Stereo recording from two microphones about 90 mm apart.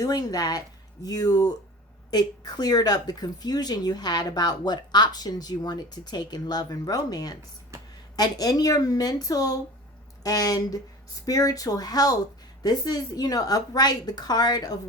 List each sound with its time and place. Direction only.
0.0 s speech: 45° left (ahead or behind)